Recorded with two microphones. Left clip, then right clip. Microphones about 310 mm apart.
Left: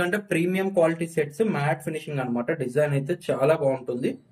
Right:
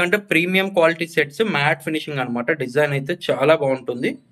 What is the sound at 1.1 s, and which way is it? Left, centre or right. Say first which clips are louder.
Speech: right 6 dB; right.